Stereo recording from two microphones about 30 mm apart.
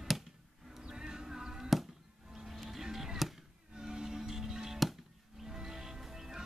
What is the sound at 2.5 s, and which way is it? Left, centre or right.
Music, centre.